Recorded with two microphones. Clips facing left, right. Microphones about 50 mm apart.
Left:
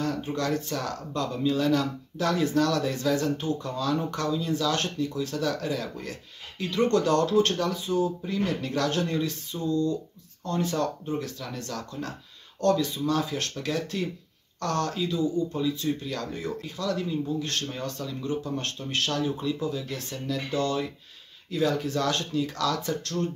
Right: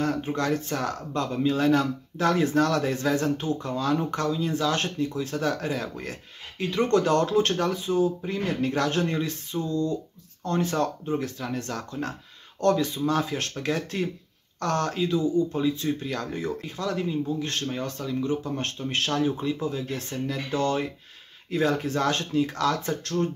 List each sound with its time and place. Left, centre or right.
0.0 s speech: right
6.6 s speech: right
10.4 s speech: right
17.1 s speech: centre; by 23.1 s right